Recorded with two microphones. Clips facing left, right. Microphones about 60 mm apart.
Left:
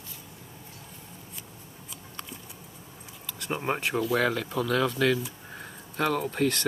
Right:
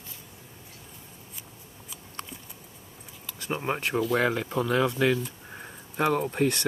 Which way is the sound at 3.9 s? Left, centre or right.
Centre.